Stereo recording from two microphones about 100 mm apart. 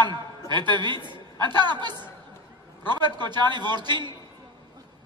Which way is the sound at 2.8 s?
50° right (ahead or behind).